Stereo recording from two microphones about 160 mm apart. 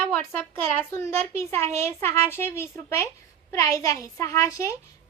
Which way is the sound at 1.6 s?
45° right (ahead or behind).